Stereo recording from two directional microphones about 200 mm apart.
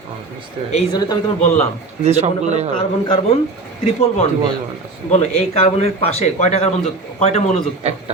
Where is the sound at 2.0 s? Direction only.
35° right (ahead or behind).